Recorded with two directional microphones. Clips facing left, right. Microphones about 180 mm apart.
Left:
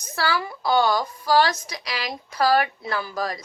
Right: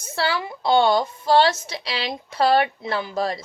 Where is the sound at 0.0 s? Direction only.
25° right (ahead or behind).